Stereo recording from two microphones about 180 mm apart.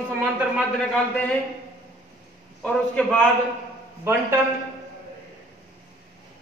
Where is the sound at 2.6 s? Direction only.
5° left (ahead or behind).